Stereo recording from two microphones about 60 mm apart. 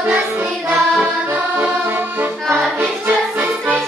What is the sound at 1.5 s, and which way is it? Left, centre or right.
Accordion, right.